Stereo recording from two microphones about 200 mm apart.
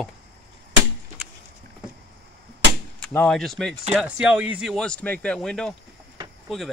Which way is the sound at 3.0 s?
5° left (ahead or behind).